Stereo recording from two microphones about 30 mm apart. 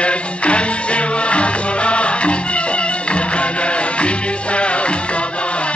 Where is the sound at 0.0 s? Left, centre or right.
Left.